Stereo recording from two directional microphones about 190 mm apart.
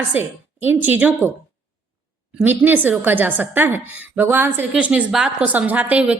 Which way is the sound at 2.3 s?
10° right (ahead or behind).